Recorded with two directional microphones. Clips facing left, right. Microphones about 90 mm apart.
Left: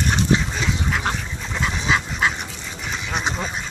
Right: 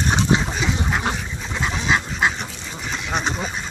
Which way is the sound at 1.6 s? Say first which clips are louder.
Even; 20° right (ahead or behind).